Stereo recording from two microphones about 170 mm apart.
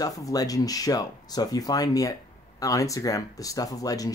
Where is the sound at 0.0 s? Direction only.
20° left (ahead or behind).